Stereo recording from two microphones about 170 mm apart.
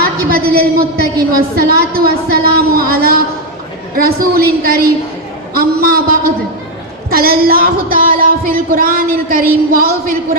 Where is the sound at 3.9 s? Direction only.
60° right (ahead or behind).